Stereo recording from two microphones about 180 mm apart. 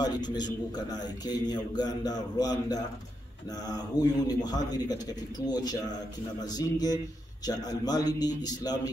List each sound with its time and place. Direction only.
0.0 s a man's voice: 25° left (ahead or behind)